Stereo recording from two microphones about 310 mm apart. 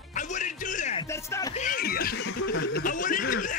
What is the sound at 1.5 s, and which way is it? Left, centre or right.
A man's voice, left.